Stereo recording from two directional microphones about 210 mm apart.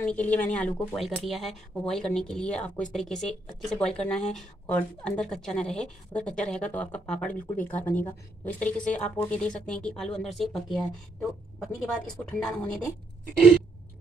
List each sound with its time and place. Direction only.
0.0 s a woman's voice: 5° left (ahead or behind)